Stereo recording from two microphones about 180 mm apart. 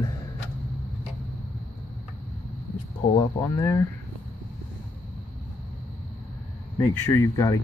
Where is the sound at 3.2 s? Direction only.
20° left (ahead or behind).